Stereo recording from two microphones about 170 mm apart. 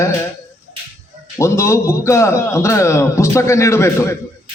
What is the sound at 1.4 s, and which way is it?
A man's voice, 15° left (ahead or behind).